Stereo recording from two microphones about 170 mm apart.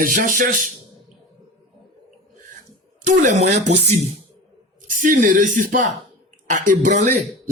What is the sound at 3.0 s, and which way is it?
Speech, 45° right (ahead or behind).